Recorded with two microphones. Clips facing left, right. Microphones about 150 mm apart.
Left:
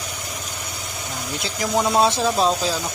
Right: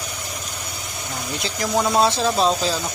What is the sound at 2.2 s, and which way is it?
Speech, 5° left (ahead or behind).